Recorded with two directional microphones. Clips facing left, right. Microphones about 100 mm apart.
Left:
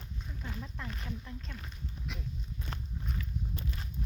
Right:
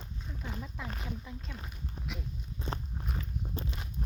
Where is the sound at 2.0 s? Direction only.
40° right (ahead or behind).